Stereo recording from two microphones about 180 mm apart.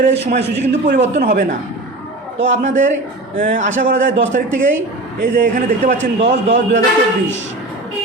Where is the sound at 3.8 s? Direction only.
85° right.